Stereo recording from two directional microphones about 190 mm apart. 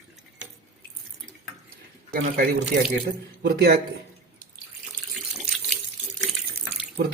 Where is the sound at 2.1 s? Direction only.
50° right (ahead or behind).